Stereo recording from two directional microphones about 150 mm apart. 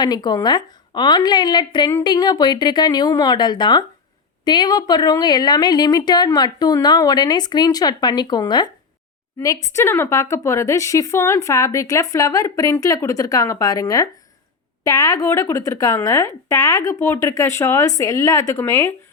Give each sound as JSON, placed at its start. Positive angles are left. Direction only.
{"t": 0.0, "sound": "a woman's voice", "side_deg": 25}